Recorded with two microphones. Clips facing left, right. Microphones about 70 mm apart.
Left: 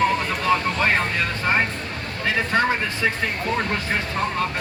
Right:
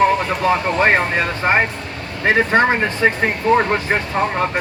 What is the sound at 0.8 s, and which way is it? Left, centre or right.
Speech, right.